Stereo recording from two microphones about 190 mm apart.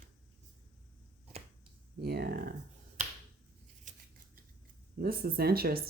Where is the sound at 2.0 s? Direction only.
55° right (ahead or behind).